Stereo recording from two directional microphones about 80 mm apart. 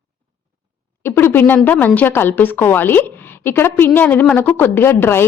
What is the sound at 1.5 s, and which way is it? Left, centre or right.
A woman's voice, centre.